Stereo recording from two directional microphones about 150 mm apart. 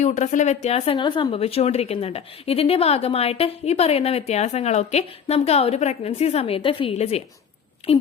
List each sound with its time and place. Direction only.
0.0 s a woman's voice: 50° left (ahead or behind)
0.9 s a woman's voice: 30° left (ahead or behind)